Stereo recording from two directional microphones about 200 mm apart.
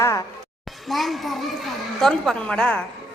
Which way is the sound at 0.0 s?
15° left (ahead or behind).